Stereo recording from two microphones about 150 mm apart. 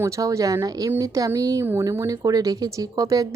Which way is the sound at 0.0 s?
20° right (ahead or behind).